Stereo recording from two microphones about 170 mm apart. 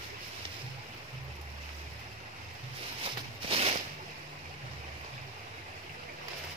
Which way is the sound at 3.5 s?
35° right (ahead or behind).